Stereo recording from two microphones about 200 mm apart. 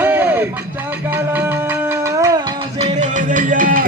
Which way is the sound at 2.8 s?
35° right (ahead or behind).